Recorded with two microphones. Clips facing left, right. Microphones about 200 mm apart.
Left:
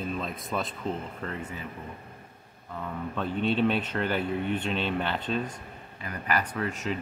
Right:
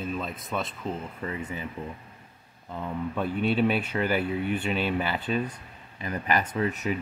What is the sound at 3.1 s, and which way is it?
Speech, 10° right (ahead or behind).